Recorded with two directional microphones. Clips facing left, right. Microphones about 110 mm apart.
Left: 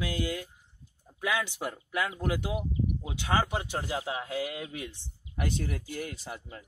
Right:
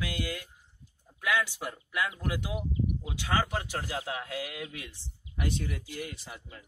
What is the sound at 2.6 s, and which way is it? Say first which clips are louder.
Speech: left 1 dB; 20° left (ahead or behind).